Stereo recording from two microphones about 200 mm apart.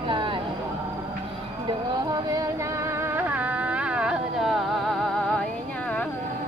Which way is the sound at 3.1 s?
10° right (ahead or behind).